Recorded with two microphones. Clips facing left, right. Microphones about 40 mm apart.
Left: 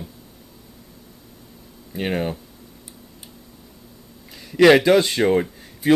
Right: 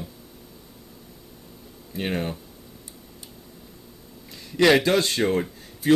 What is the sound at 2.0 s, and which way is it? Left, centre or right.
Speech, centre.